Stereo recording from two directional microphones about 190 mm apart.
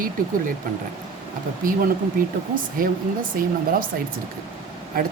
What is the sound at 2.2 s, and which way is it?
Speech, 50° right (ahead or behind).